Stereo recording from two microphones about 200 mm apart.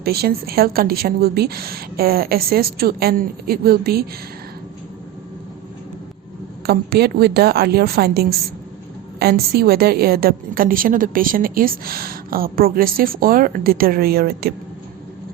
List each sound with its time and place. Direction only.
0.0 s a woman's voice: 50° right (ahead or behind)
6.7 s a woman's voice: 55° right (ahead or behind)